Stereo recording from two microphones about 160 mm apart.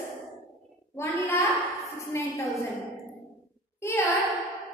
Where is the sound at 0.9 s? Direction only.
15° left (ahead or behind).